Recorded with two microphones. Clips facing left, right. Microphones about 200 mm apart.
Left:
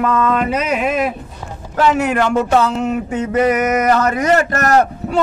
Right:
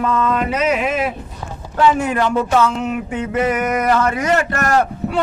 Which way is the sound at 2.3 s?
40° left (ahead or behind).